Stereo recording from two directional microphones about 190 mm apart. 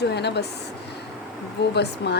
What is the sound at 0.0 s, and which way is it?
Speech, 60° left (ahead or behind).